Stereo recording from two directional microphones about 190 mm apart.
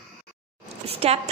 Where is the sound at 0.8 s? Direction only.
30° right (ahead or behind).